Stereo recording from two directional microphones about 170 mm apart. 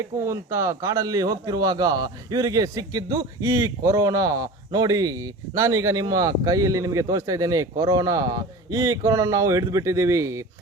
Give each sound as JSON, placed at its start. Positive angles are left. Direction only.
{"t": 0.0, "sound": "speech", "side_deg": -15}